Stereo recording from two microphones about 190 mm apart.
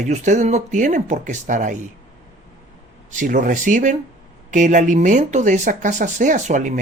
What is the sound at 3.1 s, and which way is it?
Speech, 40° right (ahead or behind).